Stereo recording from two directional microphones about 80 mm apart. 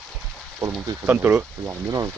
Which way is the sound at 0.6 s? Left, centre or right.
Right.